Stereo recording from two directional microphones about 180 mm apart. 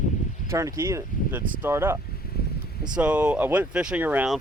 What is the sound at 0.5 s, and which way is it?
Speech, 15° right (ahead or behind).